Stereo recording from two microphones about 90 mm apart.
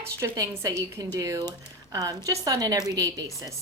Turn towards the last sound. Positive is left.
turn(degrees=-40)  # may be behind; listen again after turning